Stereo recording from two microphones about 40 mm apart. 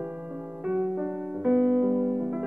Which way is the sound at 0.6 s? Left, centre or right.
Right.